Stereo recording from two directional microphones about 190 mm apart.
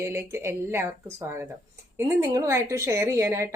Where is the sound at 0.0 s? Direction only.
15° right (ahead or behind).